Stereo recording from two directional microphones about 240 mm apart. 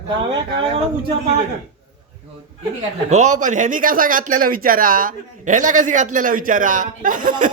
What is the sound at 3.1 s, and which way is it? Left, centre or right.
Speech, right.